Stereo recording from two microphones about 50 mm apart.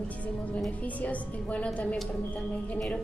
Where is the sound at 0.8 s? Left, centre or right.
Left.